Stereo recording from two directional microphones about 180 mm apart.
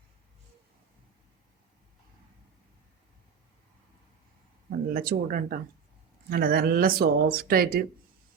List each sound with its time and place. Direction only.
4.7 s speech: 55° right (ahead or behind)